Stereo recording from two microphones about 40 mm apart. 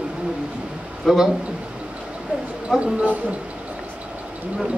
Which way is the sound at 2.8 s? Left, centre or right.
Right.